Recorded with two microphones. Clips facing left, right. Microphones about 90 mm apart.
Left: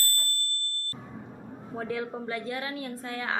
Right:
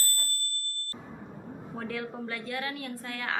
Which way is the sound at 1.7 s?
20° left (ahead or behind).